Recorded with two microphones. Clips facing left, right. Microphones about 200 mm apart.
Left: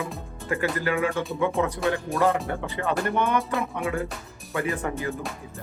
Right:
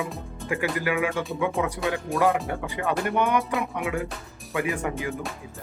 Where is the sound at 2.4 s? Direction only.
15° right (ahead or behind).